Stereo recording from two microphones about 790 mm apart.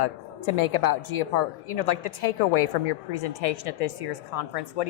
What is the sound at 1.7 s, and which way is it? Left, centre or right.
A woman's voice, left.